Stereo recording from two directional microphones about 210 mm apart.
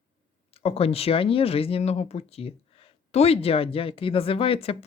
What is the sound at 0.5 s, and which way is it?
Speech, 25° left (ahead or behind).